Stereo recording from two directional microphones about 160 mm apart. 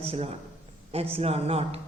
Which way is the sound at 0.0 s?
40° right (ahead or behind).